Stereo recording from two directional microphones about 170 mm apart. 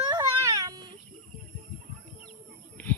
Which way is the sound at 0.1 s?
20° right (ahead or behind).